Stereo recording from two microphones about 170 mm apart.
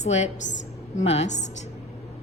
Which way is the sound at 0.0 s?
40° left (ahead or behind).